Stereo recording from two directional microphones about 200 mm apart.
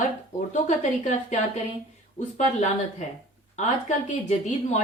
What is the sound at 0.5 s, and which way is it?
Speech, 35° left (ahead or behind).